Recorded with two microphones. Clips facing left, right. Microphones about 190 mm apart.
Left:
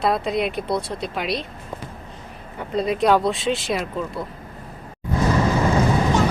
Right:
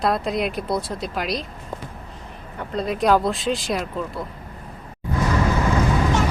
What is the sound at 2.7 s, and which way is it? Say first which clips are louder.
Speech: left 1 dB; centre (ahead or behind).